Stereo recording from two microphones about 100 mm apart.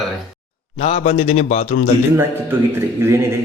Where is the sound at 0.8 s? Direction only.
90° left.